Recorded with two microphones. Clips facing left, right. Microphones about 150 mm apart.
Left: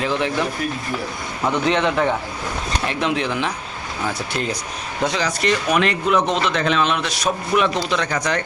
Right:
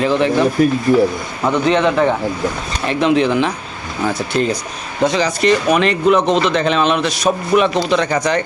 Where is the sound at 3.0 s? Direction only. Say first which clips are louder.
Right 10 dB; 5° left (ahead or behind).